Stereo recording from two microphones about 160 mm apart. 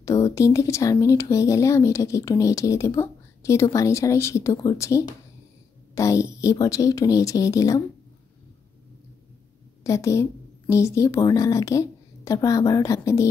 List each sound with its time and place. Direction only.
0.0 s speech: 20° left (ahead or behind)
9.8 s speech: 20° left (ahead or behind)